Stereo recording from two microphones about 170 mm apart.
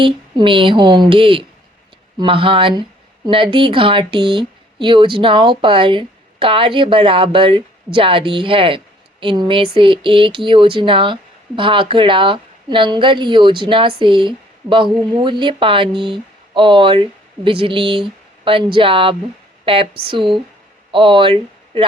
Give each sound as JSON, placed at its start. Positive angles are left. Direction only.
{"t": 0.0, "sound": "a woman's voice", "side_deg": -30}